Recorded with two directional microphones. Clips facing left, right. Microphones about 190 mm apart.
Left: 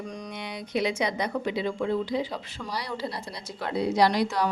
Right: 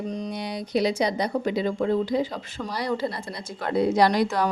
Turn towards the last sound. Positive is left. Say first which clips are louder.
# right 2 dB
turn(degrees=-50)  # may be behind; listen again after turning